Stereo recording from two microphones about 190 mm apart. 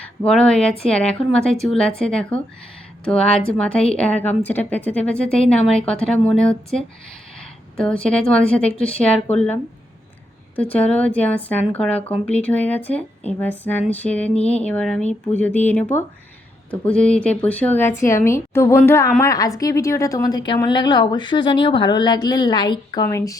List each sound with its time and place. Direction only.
0.0 s a woman's voice: 5° left (ahead or behind)